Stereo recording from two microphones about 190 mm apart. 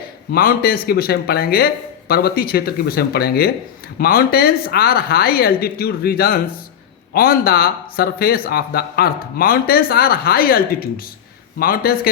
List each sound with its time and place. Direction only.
0.3 s speech: 50° left (ahead or behind)